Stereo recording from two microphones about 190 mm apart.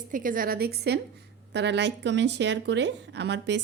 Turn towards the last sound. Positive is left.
turn(degrees=-65)  # may be behind; listen again after turning